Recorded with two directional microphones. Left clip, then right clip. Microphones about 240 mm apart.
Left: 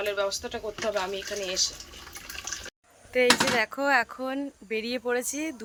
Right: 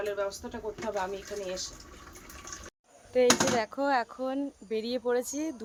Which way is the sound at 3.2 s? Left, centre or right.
Right.